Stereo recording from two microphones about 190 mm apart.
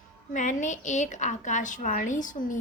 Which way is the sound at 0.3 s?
40° left (ahead or behind).